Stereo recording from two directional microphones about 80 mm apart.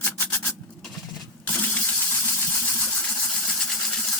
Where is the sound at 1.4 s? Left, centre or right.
Centre.